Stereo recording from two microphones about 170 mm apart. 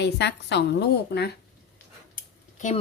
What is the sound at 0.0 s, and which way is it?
A woman's voice, 90° left.